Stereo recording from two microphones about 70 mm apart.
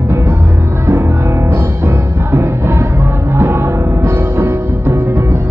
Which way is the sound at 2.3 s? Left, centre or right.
Right.